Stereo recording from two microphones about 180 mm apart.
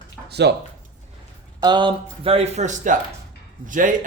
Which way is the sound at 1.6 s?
25° right (ahead or behind).